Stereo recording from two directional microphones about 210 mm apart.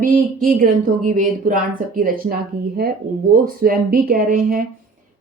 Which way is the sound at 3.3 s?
45° right (ahead or behind).